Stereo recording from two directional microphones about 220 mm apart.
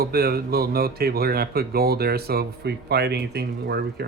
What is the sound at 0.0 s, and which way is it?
Speech, 45° right (ahead or behind).